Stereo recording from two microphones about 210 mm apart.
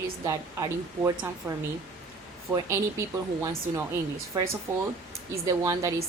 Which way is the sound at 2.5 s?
15° right (ahead or behind).